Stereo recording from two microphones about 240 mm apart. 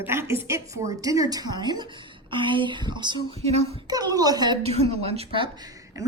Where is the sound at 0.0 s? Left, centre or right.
Centre.